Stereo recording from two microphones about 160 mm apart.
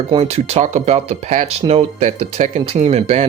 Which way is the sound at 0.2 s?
40° right (ahead or behind).